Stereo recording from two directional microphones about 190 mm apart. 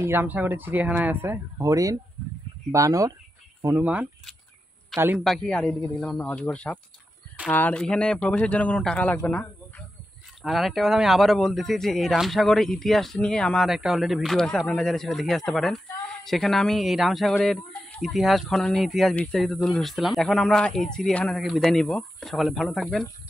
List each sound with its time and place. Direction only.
0.0 s a man's voice: 10° right (ahead or behind)
5.2 s speech: centre (ahead or behind)